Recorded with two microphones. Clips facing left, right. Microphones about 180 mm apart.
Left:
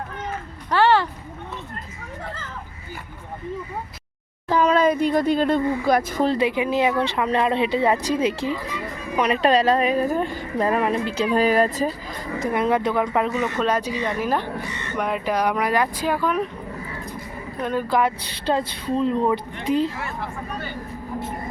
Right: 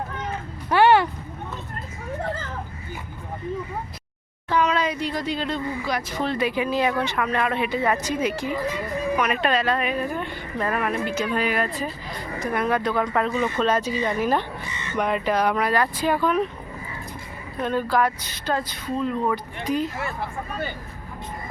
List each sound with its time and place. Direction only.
0.7 s a sound: 15° right (ahead or behind)
4.4 s speech: 45° left (ahead or behind)
6.3 s a woman's voice: 25° left (ahead or behind); by 11.9 s 40° left (ahead or behind)
12.4 s speech: 25° left (ahead or behind); by 14.4 s 5° left (ahead or behind)
14.7 s a sound: 60° left (ahead or behind)
14.9 s speech: 5° left (ahead or behind)
17.6 s speech: 10° left (ahead or behind)
17.8 s speech: 20° left (ahead or behind)